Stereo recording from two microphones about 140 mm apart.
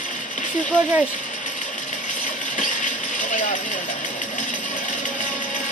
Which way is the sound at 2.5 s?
65° left (ahead or behind).